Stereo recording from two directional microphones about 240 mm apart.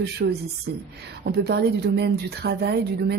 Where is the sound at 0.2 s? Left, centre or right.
Right.